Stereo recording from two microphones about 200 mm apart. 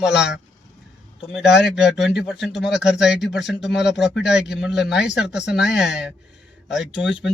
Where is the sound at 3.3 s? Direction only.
60° left (ahead or behind).